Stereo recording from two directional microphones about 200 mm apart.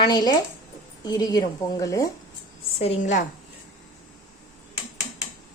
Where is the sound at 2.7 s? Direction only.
30° left (ahead or behind).